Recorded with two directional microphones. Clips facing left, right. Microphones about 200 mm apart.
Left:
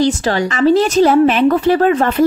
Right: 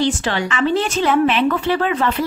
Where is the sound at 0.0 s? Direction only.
40° left (ahead or behind).